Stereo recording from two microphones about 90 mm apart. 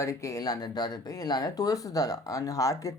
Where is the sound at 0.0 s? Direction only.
35° left (ahead or behind).